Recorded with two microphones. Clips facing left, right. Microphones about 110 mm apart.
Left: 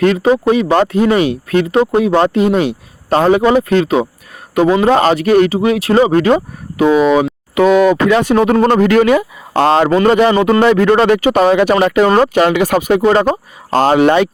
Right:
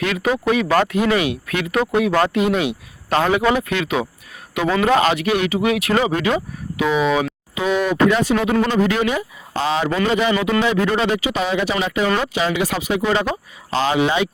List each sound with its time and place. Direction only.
0.0 s speech: 35° left (ahead or behind)
7.5 s speech: 70° left (ahead or behind); by 8.3 s 85° left
8.4 s speech: 45° left (ahead or behind)
8.8 s speech: 65° left (ahead or behind)
12.0 s speech: 50° left (ahead or behind)